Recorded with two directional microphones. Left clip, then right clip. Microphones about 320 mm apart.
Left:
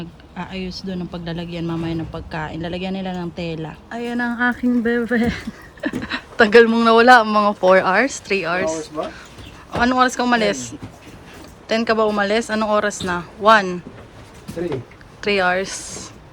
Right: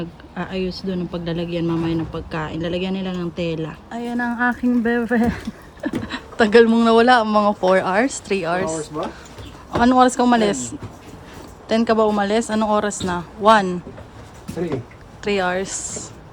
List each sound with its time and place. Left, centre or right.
0.0 s a man's voice: centre
4.0 s speech: centre
5.1 s a man's voice: centre
9.8 s speech: centre
11.7 s speech: centre
15.2 s speech: centre
15.8 s speech: right